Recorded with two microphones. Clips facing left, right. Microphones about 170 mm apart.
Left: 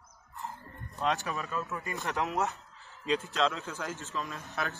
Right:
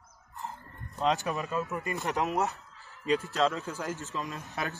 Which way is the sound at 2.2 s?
Centre (ahead or behind).